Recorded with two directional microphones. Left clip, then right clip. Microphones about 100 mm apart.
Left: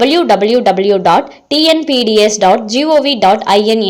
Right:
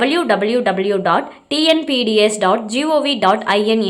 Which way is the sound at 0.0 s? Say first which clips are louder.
Left 6 dB; 35° left (ahead or behind).